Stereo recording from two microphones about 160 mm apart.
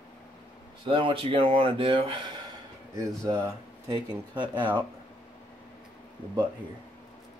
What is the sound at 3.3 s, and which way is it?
Speech, 20° right (ahead or behind).